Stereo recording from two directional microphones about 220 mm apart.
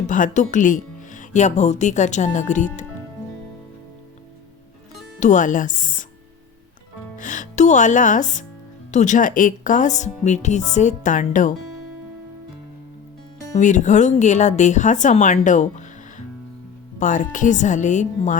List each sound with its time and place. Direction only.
0.1 s speech: 35° left (ahead or behind)
5.2 s speech: 35° left (ahead or behind)
7.2 s speech: 35° left (ahead or behind)
13.6 s speech: 35° left (ahead or behind)